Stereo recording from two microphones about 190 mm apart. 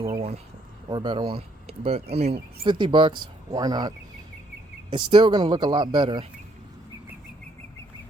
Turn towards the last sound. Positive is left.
turn(degrees=-25)  # may be behind; listen again after turning